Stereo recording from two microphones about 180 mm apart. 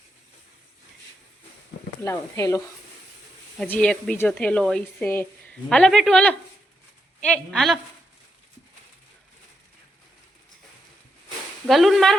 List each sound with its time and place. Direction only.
2.0 s speech: 15° left (ahead or behind)
3.6 s a woman's voice: 5° left (ahead or behind)
11.7 s a woman's voice: centre (ahead or behind)